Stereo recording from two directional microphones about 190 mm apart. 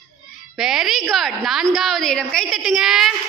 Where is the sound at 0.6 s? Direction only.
Centre (ahead or behind).